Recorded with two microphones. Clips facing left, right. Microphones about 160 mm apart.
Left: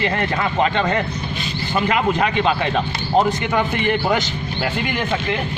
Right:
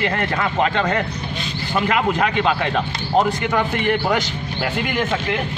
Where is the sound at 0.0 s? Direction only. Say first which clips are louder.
Left 1 dB; centre (ahead or behind).